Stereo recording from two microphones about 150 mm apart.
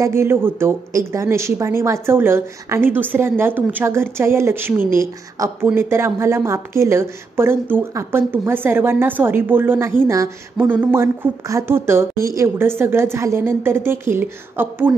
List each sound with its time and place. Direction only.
0.0 s a woman's voice: 15° right (ahead or behind)